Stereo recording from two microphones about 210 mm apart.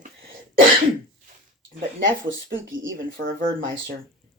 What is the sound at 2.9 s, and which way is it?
Speech, 40° right (ahead or behind).